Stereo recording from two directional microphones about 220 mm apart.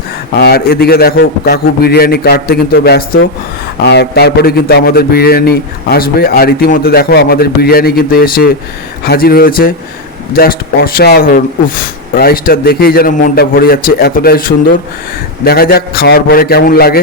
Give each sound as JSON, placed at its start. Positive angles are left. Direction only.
{"t": 0.3, "sound": "a man's voice", "side_deg": 45}